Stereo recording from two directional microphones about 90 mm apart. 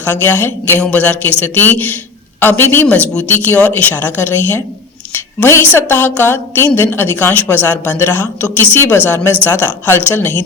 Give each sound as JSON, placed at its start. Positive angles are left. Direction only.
{"t": 0.0, "sound": "speech", "side_deg": 25}